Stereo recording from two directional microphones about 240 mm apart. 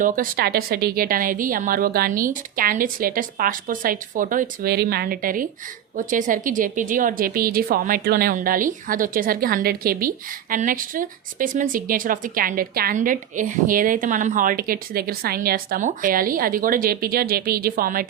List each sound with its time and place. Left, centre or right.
0.0 s a woman's voice: right